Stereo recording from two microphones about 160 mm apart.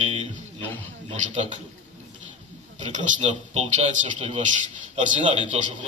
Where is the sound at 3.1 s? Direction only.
45° right (ahead or behind).